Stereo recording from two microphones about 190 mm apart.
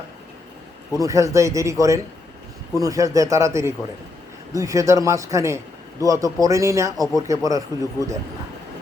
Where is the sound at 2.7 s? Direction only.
15° right (ahead or behind).